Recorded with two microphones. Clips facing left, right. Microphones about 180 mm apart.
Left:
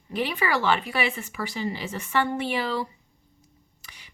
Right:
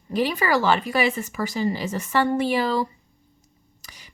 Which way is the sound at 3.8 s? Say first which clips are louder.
Right 4 dB; 40° right (ahead or behind).